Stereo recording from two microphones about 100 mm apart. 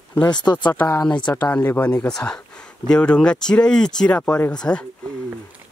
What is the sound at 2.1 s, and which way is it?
Speech, 5° left (ahead or behind).